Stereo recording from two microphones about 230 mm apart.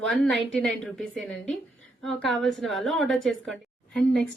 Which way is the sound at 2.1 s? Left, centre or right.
Centre.